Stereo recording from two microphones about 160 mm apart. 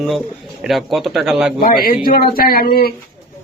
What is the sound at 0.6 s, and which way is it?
Speech, centre (ahead or behind).